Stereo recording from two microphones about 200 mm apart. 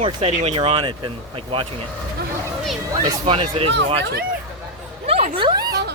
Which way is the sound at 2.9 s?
25° right (ahead or behind).